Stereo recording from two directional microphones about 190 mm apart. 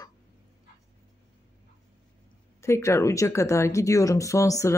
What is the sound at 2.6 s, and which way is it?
Speech, 15° left (ahead or behind).